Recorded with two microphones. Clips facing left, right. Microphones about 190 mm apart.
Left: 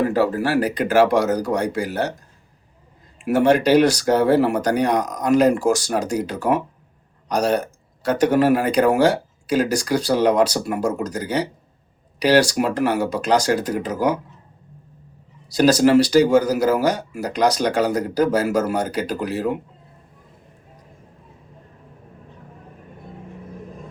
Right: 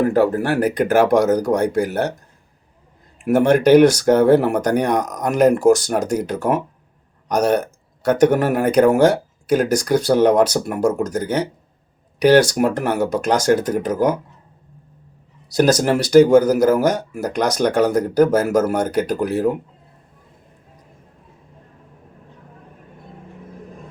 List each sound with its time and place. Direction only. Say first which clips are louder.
0.1 s speech: right 2 dB; 55° right (ahead or behind)
3.2 s speech: right 2 dB; 50° right (ahead or behind)
15.5 s speech: left 2 dB; 50° right (ahead or behind)